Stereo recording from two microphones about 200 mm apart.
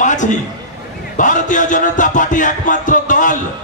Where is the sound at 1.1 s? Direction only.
40° left (ahead or behind).